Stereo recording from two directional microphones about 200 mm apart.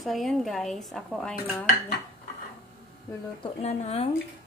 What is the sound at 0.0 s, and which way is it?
Speech, centre (ahead or behind).